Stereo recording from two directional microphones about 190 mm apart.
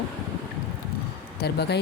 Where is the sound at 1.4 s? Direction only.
60° left (ahead or behind).